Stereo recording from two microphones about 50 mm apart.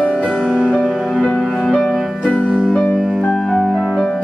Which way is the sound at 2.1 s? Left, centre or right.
Left.